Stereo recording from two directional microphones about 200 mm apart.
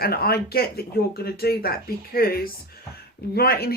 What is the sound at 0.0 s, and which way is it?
Speech, 50° left (ahead or behind).